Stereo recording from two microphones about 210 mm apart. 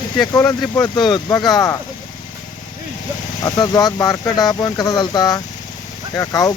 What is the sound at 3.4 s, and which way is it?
Speech, 20° left (ahead or behind).